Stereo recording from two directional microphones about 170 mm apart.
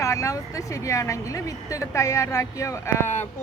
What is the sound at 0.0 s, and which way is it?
Speech, 20° left (ahead or behind).